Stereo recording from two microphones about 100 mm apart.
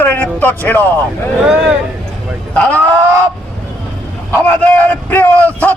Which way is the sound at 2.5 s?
15° left (ahead or behind).